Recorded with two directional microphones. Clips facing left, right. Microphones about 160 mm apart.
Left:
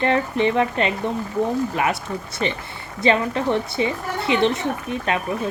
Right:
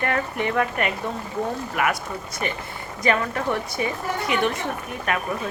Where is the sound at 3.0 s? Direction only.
25° left (ahead or behind).